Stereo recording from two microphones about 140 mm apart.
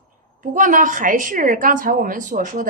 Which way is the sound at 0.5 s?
70° right (ahead or behind).